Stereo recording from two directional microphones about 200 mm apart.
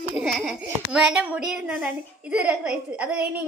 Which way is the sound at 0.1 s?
5° right (ahead or behind).